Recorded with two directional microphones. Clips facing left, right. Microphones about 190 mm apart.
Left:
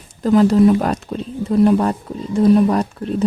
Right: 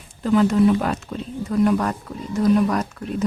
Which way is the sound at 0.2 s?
35° left (ahead or behind).